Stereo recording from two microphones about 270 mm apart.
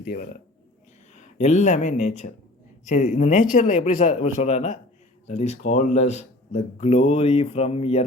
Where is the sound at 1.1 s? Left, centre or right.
Left.